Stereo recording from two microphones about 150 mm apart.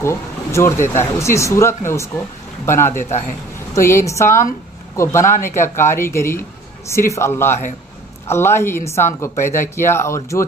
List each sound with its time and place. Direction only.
0.0 s speech: 20° left (ahead or behind)
2.9 s a man's voice: 55° left (ahead or behind)
3.7 s a woman's voice: 20° left (ahead or behind)